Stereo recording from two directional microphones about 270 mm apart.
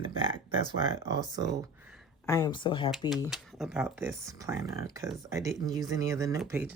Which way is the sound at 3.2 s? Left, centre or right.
Centre.